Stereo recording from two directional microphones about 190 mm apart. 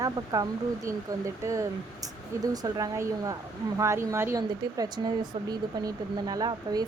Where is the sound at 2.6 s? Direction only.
20° right (ahead or behind).